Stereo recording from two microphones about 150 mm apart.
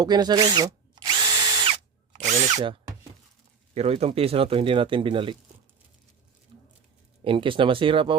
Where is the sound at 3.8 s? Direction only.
40° right (ahead or behind).